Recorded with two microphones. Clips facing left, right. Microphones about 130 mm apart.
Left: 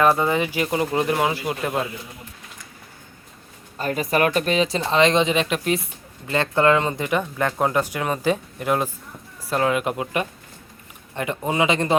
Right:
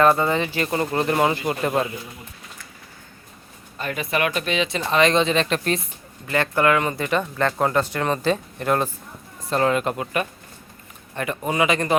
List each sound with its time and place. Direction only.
0.0 s speech: 10° left (ahead or behind)
3.8 s speech: 40° left (ahead or behind); by 5.8 s 10° left (ahead or behind)
6.2 s speech: 20° left (ahead or behind)